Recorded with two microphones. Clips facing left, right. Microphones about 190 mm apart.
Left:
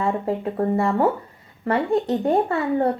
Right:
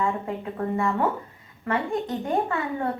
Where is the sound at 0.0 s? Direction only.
35° left (ahead or behind).